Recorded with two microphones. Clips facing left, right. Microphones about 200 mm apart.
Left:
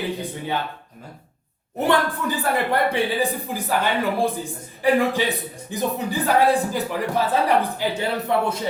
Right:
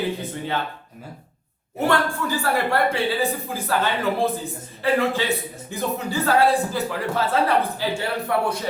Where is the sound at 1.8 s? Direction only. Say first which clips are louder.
Left 1 dB; 20° left (ahead or behind).